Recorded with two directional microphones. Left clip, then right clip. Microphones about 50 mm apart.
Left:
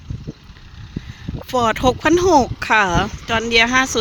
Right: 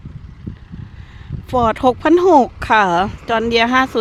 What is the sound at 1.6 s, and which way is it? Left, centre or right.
Speech, right.